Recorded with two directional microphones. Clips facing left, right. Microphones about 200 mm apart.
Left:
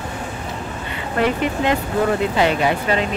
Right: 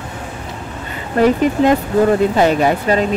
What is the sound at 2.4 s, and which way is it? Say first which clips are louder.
Speech: right 4 dB; 40° right (ahead or behind).